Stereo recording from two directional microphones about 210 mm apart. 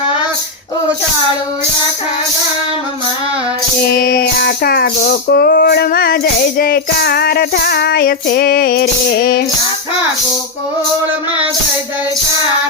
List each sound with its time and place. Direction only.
3.9 s music: 45° left (ahead or behind)